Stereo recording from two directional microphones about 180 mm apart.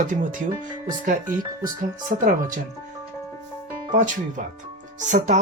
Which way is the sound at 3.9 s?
45° right (ahead or behind).